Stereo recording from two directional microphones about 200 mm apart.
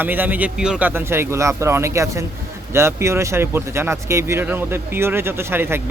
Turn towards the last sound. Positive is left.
turn(degrees=-10)  # may be behind; listen again after turning